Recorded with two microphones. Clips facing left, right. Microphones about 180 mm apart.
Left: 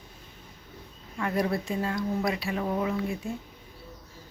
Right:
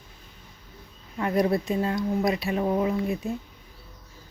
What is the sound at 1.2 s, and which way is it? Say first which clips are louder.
Speech: right 4 dB; 20° right (ahead or behind).